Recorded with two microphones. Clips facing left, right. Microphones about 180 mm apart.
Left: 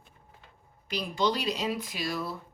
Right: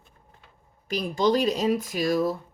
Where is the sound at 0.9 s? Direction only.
45° right (ahead or behind).